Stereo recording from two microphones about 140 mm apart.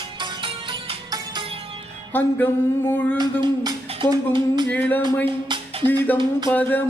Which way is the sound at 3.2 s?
30° right (ahead or behind).